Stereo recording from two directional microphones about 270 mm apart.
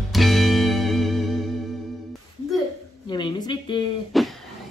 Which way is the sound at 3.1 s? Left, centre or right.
Centre.